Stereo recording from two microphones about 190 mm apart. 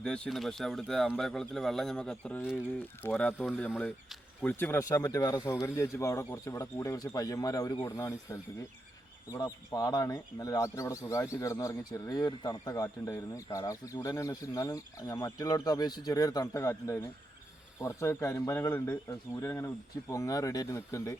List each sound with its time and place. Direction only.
0.0 s speech: 5° left (ahead or behind)